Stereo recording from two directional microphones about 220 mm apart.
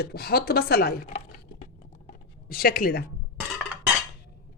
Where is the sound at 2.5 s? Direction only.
40° left (ahead or behind).